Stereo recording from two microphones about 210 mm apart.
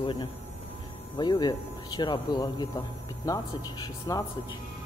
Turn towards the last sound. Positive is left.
turn(degrees=15)  # may be behind; listen again after turning